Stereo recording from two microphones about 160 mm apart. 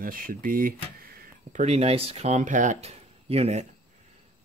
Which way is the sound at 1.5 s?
45° right (ahead or behind).